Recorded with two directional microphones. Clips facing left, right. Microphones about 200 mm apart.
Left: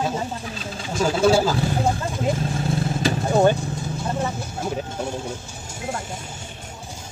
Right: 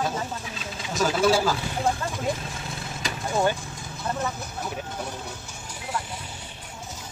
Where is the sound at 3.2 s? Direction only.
40° left (ahead or behind).